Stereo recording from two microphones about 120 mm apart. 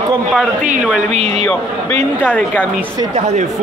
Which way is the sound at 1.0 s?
65° right (ahead or behind).